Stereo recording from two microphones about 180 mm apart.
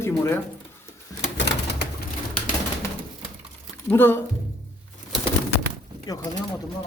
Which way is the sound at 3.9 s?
10° left (ahead or behind).